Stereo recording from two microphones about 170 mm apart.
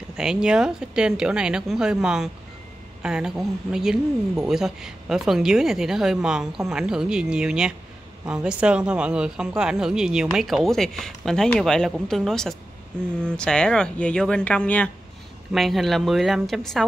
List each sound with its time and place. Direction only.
0.2 s speech: 5° right (ahead or behind)